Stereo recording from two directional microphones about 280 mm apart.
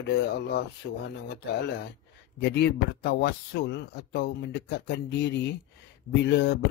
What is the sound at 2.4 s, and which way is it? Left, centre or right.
A man's voice, left.